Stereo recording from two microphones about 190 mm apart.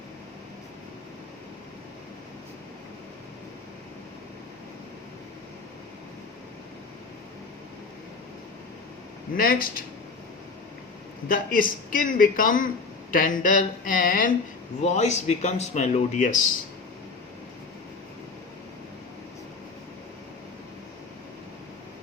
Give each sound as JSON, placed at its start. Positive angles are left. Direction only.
{"t": 9.3, "sound": "a man's voice", "side_deg": 50}
{"t": 11.3, "sound": "a man's voice", "side_deg": 45}